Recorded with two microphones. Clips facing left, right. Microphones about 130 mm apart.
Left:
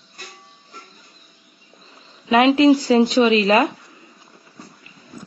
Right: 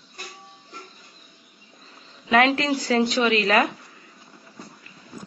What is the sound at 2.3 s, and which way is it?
Speech, 20° left (ahead or behind).